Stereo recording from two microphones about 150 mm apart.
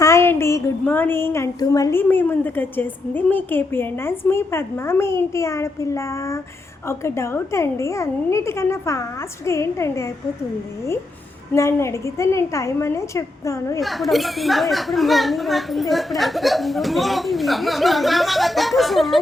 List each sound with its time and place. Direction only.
0.0 s a sound: 20° left (ahead or behind)
4.3 s a woman's voice: 15° left (ahead or behind)
11.5 s a woman's voice: 20° left (ahead or behind)
13.8 s speech: centre (ahead or behind)